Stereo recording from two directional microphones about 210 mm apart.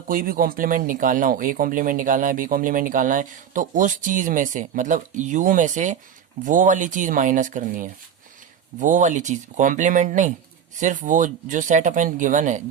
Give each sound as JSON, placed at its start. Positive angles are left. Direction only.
{"t": 0.1, "sound": "speech", "side_deg": -40}